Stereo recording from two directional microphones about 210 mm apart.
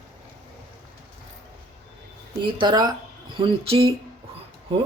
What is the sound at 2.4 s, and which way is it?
Speech, 25° right (ahead or behind).